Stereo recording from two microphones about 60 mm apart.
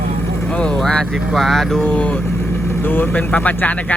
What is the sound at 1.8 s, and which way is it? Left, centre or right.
Speech, centre.